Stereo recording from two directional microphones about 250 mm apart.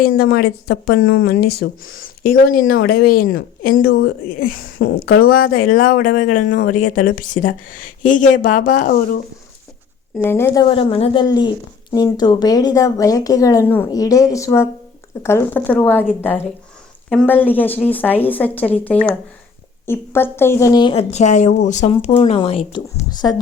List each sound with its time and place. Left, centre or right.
0.0 s speech: left
10.2 s speech: centre
17.1 s a woman's voice: centre